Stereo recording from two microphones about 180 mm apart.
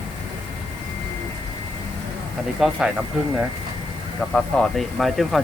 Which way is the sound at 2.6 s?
5° right (ahead or behind).